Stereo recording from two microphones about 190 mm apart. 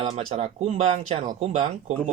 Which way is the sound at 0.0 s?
30° right (ahead or behind).